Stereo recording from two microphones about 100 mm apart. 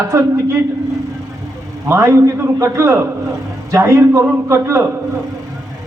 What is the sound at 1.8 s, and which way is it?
A man's voice, 30° right (ahead or behind).